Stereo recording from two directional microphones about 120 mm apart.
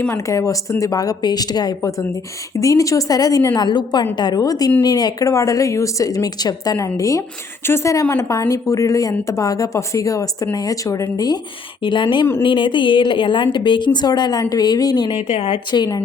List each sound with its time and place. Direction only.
0.1 s speech: 25° left (ahead or behind)
11.8 s a woman's voice: 45° left (ahead or behind)
15.1 s a woman's voice: 55° left (ahead or behind)
15.5 s speech: 35° left (ahead or behind)